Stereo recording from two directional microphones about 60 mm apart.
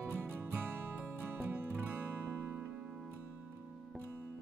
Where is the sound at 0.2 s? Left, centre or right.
Right.